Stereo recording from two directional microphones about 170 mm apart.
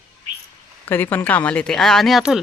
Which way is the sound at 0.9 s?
10° left (ahead or behind).